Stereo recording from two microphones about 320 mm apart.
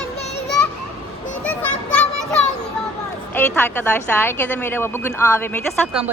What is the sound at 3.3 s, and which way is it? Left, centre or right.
A woman's voice, centre.